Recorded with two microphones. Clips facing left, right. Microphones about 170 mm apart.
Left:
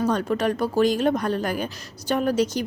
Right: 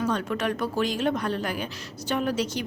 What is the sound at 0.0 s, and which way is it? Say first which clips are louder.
Speech: left 4 dB; 40° left (ahead or behind).